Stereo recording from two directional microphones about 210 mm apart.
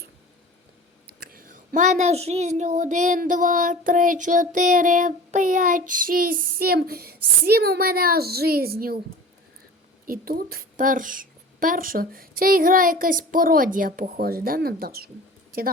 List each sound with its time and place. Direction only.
1.2 s a child's voice: 45° right (ahead or behind)
10.1 s a woman's voice: 45° right (ahead or behind)